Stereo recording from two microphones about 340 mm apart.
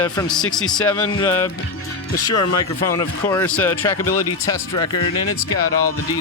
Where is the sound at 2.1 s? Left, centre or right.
Left.